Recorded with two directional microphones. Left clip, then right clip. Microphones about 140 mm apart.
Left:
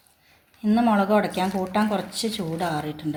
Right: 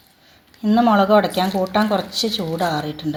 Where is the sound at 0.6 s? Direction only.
40° right (ahead or behind).